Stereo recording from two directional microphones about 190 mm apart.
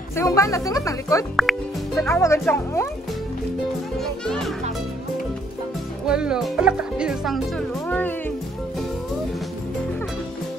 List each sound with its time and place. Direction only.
0.1 s speech: 15° left (ahead or behind)
1.3 s speech: centre (ahead or behind)
2.0 s speech: 15° left (ahead or behind)
4.0 s speech: centre (ahead or behind)
6.0 s speech: 5° right (ahead or behind)